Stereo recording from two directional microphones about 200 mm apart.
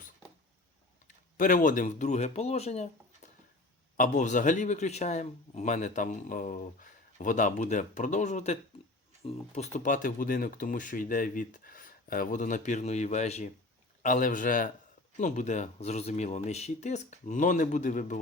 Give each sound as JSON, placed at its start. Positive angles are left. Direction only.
{"t": 1.4, "sound": "a man's voice", "side_deg": 40}
{"t": 3.9, "sound": "a man's voice", "side_deg": 40}